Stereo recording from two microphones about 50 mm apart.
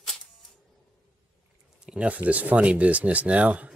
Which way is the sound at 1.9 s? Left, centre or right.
Right.